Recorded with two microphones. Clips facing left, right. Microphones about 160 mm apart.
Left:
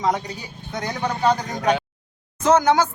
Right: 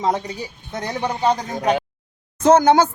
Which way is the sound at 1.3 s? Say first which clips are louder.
Right 1 dB; 25° right (ahead or behind).